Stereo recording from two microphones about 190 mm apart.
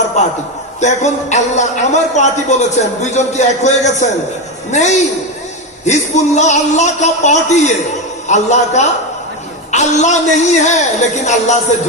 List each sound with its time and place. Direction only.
0.8 s a man's voice: 40° left (ahead or behind)